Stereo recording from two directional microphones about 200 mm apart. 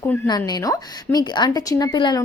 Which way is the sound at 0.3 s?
20° left (ahead or behind).